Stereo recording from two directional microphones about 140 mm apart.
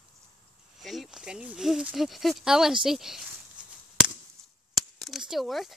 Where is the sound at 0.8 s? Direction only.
Centre (ahead or behind).